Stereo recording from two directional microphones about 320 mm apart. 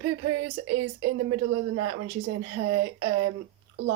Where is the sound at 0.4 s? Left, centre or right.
Right.